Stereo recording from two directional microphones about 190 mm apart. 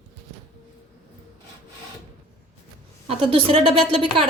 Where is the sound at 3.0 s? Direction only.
30° right (ahead or behind).